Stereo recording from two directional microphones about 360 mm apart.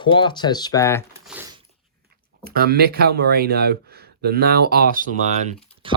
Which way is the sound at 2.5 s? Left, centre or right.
Right.